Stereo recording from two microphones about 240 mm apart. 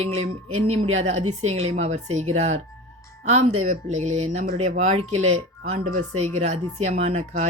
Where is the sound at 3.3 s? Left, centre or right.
Right.